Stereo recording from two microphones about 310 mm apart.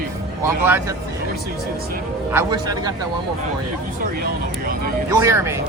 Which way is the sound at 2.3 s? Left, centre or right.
Centre.